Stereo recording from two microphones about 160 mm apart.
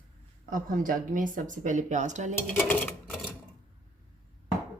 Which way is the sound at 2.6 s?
10° left (ahead or behind).